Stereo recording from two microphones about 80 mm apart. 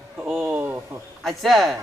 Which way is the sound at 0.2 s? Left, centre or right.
Centre.